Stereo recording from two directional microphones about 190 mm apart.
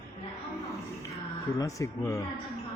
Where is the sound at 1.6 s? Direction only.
15° left (ahead or behind).